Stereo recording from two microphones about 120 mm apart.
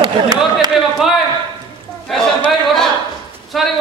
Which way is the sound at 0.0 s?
35° right (ahead or behind).